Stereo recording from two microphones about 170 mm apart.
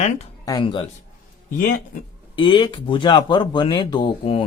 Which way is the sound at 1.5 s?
55° left (ahead or behind).